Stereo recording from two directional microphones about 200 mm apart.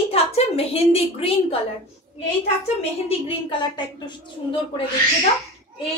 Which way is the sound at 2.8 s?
30° left (ahead or behind).